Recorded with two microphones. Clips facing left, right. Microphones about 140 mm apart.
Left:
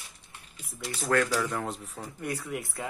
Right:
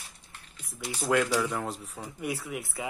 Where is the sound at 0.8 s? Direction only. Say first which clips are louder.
Even; 10° right (ahead or behind).